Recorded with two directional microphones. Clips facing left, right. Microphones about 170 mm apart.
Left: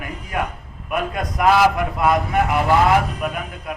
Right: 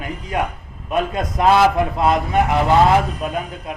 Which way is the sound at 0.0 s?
25° right (ahead or behind).